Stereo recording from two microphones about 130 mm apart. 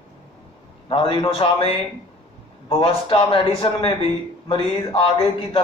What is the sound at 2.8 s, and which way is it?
A man's voice, 45° left (ahead or behind).